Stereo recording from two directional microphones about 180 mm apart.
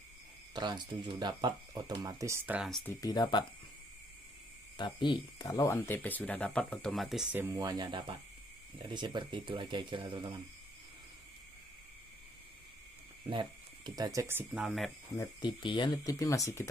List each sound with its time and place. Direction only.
0.6 s speech: 25° right (ahead or behind); by 2.8 s 5° right (ahead or behind)
2.8 s speech: 10° left (ahead or behind)
3.1 s speech: 25° left (ahead or behind)
4.7 s speech: 25° left (ahead or behind); by 10.3 s 30° right (ahead or behind)
13.2 s speech: 25° right (ahead or behind)
14.6 s speech: centre (ahead or behind)
15.1 s speech: 25° left (ahead or behind)